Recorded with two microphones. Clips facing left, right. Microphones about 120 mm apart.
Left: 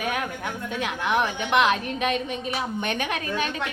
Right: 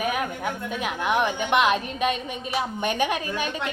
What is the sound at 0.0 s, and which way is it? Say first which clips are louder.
A woman's voice: right 2 dB; 5° right (ahead or behind).